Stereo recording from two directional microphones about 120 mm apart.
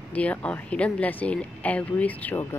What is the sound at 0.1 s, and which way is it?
Speech, 10° left (ahead or behind).